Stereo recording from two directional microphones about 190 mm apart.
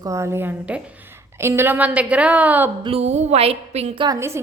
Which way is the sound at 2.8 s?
30° right (ahead or behind).